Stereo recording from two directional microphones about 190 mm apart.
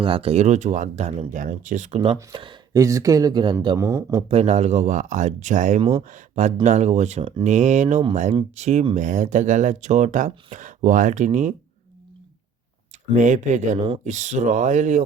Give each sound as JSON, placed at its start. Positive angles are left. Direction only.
{"t": 0.0, "sound": "speech", "side_deg": -30}
{"t": 4.3, "sound": "speech", "side_deg": -35}
{"t": 13.1, "sound": "speech", "side_deg": -40}